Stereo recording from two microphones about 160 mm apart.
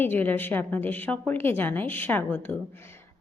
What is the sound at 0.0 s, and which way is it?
A woman's voice, 10° left (ahead or behind).